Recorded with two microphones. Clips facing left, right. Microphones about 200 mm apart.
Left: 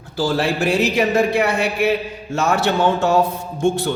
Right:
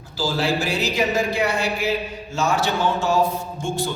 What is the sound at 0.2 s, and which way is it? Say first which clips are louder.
A man's voice: left 4 dB; 55° left (ahead or behind).